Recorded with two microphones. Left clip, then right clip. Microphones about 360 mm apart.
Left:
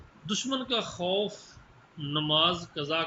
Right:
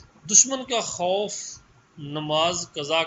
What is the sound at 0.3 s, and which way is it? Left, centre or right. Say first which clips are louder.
Speech: right 9 dB; centre.